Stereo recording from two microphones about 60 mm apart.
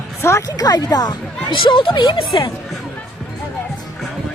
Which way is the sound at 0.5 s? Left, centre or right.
Left.